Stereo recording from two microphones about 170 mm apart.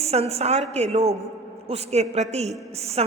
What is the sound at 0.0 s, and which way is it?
A woman's voice, 40° right (ahead or behind).